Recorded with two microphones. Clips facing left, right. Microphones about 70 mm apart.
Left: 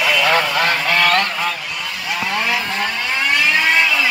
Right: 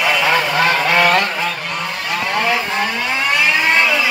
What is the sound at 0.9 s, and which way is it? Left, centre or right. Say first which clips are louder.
Goose: right 2 dB; right.